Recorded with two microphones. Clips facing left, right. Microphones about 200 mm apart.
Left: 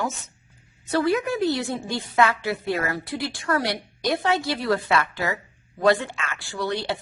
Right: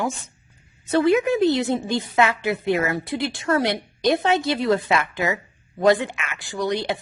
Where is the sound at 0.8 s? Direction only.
20° right (ahead or behind).